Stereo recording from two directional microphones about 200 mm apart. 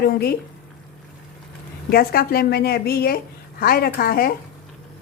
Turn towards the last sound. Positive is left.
turn(degrees=50)  # may be behind; listen again after turning